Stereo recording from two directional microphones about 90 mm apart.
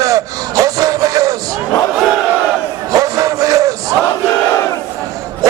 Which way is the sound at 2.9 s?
40° right (ahead or behind).